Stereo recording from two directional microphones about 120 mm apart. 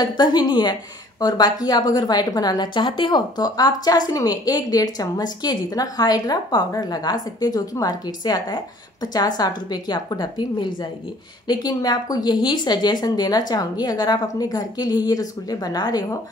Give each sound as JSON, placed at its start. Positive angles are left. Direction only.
{"t": 0.0, "sound": "a woman's voice", "side_deg": 35}